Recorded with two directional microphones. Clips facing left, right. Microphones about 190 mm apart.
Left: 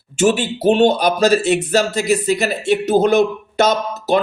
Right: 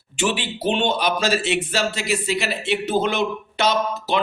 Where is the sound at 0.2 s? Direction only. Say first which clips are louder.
Left 8 dB; 45° left (ahead or behind).